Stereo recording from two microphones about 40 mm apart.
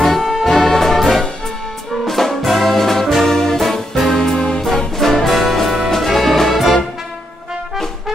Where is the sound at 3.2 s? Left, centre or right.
Centre.